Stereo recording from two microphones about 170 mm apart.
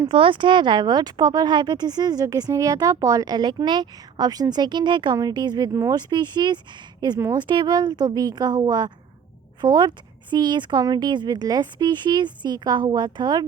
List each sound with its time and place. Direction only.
0.1 s speech: 30° right (ahead or behind)